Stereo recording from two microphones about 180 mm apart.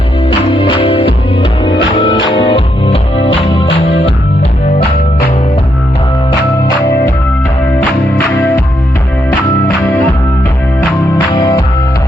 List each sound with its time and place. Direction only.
0.3 s music: 30° left (ahead or behind)
2.3 s music: 30° left (ahead or behind)
8.4 s music: 10° left (ahead or behind)
11.3 s music: 20° left (ahead or behind)